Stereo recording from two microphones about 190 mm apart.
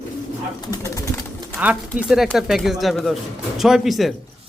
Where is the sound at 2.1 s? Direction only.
Centre (ahead or behind).